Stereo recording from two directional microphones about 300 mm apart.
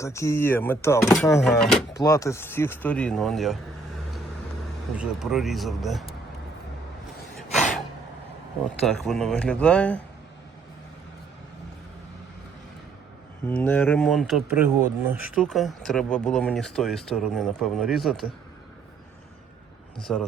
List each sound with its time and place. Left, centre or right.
0.0 s speech: centre
7.5 s a sound: left
8.9 s speech: centre
13.5 s speech: centre
20.0 s speech: centre